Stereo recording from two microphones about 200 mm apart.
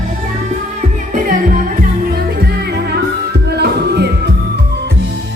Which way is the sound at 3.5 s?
55° right (ahead or behind).